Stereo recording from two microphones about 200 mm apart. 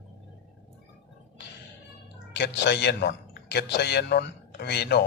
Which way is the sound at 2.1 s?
60° left (ahead or behind).